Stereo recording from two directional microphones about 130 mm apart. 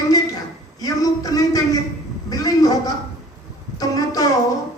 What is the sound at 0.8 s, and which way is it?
Speech, 30° left (ahead or behind).